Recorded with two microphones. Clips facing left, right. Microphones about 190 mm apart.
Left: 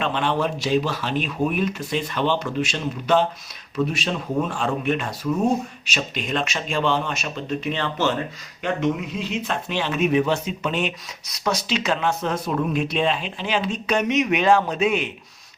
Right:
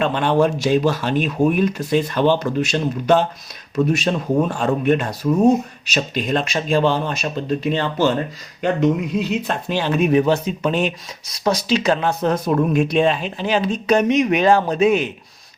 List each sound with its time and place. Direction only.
0.0 s speech: 45° right (ahead or behind)